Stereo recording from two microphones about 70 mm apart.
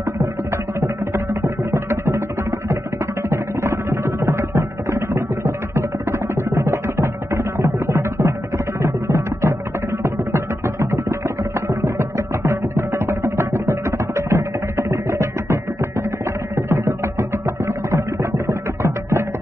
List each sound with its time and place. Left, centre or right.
0.7 s music: right
3.3 s music: right
18.5 s music: right